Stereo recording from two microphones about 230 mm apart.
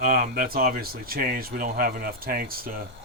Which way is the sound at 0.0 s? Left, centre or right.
Right.